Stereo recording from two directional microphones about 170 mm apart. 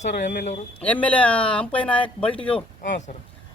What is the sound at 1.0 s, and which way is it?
Speech, 10° left (ahead or behind).